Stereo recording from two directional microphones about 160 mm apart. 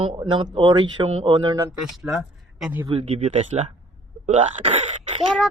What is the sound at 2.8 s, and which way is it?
Speech, 35° right (ahead or behind).